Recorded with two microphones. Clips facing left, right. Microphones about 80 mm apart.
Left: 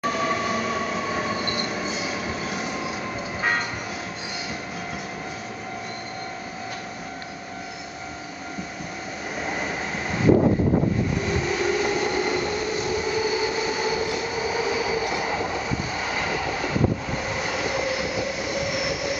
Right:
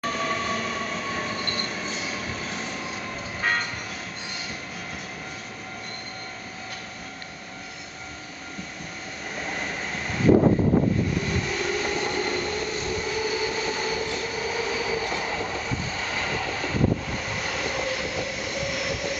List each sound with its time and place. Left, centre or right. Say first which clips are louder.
0.0 s train: left 3 dB; centre
9.4 s train: left 3 dB; centre
11.3 s train: left 4 dB; centre